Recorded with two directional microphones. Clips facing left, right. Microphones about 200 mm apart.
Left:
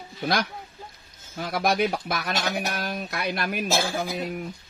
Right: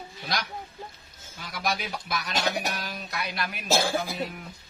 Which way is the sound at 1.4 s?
55° left (ahead or behind).